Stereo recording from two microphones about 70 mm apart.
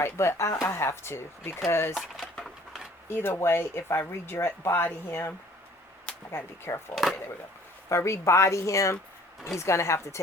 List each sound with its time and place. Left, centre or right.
0.0 s speech: left
3.1 s speech: left
6.3 s speech: left
6.9 s speech: centre
7.9 s speech: left